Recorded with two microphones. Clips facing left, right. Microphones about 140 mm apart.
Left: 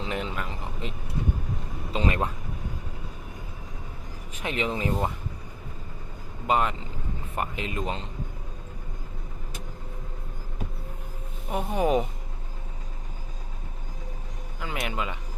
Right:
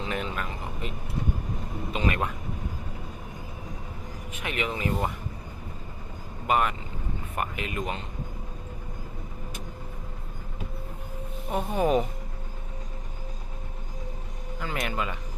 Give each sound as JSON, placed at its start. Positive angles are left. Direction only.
{"t": 0.0, "sound": "speech", "side_deg": 20}
{"t": 1.9, "sound": "a sound", "side_deg": 30}
{"t": 4.4, "sound": "speech", "side_deg": 30}
{"t": 6.5, "sound": "speech", "side_deg": 25}
{"t": 11.5, "sound": "speech", "side_deg": 15}
{"t": 14.6, "sound": "speech", "side_deg": 15}